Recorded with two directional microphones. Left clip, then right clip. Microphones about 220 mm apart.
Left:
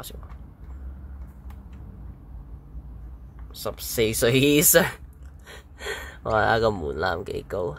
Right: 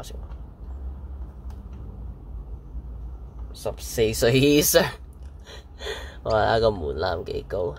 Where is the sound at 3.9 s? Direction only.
10° left (ahead or behind).